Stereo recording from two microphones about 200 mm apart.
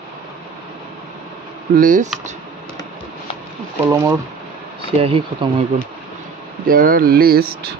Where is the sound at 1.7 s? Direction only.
45° right (ahead or behind).